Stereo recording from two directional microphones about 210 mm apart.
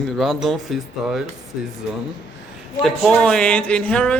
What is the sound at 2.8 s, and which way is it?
Speech, centre (ahead or behind).